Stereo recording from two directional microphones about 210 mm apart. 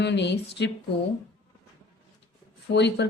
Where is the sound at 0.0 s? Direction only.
55° left (ahead or behind).